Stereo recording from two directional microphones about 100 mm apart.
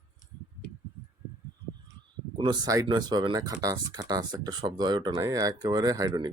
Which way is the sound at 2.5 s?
40° right (ahead or behind).